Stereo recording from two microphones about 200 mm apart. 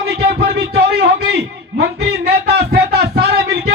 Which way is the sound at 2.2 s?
50° right (ahead or behind).